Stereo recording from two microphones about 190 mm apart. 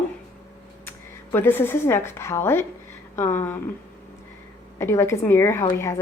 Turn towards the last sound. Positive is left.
turn(degrees=15)  # may be behind; listen again after turning